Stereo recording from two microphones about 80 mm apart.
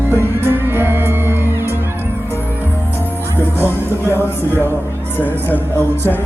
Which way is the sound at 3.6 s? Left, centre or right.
Left.